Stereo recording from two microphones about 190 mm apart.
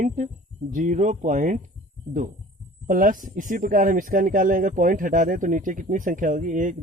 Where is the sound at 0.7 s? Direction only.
40° right (ahead or behind).